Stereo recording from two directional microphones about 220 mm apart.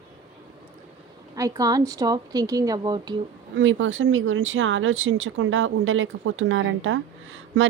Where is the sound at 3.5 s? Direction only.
60° right (ahead or behind).